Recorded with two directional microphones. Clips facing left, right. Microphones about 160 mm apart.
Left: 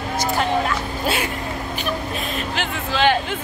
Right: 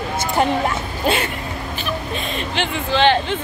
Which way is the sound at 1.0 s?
10° left (ahead or behind).